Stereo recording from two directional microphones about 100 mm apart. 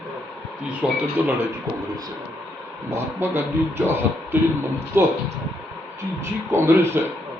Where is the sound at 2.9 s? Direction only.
25° right (ahead or behind).